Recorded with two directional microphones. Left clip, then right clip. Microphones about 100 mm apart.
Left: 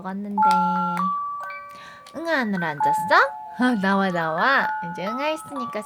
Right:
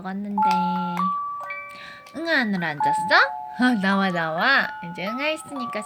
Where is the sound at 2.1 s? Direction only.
35° left (ahead or behind).